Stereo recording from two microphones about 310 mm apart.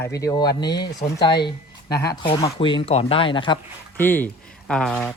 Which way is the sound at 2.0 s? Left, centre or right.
Centre.